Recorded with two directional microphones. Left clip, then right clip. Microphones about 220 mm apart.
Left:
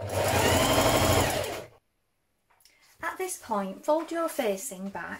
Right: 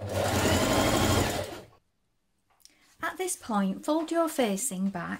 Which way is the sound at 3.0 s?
55° right (ahead or behind).